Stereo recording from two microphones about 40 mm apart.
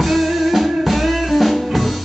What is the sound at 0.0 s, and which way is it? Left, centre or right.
Music, centre.